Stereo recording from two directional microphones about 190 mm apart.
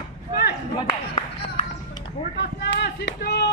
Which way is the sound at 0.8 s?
30° left (ahead or behind).